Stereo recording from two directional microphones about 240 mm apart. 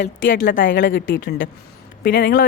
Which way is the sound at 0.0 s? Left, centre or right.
Left.